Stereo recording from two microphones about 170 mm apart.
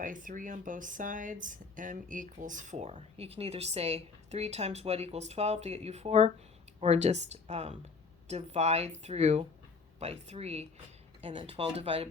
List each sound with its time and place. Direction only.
0.0 s speech: 50° right (ahead or behind); by 12.0 s 35° right (ahead or behind)